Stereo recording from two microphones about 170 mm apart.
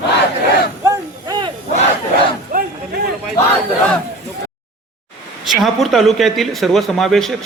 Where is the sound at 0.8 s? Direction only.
20° right (ahead or behind).